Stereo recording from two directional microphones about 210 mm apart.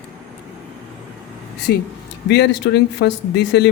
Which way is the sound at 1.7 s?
50° left (ahead or behind).